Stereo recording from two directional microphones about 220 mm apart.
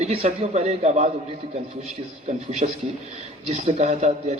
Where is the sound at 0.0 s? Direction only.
25° right (ahead or behind).